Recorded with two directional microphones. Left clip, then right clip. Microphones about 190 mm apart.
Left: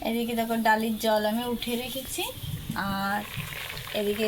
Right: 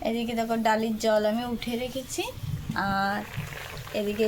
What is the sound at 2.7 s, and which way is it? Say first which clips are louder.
Speech: right 2 dB; 30° right (ahead or behind).